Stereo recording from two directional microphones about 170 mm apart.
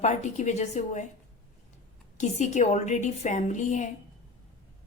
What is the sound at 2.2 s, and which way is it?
A woman's voice, 45° left (ahead or behind).